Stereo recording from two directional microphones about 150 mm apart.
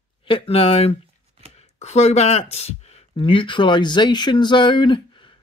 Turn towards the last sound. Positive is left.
turn(degrees=30)  # may be behind; listen again after turning